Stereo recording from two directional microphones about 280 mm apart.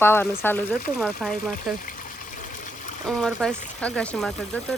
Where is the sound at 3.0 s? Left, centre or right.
Centre.